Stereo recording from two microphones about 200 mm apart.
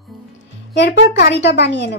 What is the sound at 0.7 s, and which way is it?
Speech, 60° left (ahead or behind).